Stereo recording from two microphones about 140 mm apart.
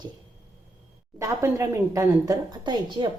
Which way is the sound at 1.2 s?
20° right (ahead or behind).